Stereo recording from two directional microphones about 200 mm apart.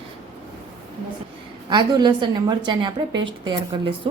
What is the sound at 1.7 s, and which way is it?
A woman's voice, 20° right (ahead or behind).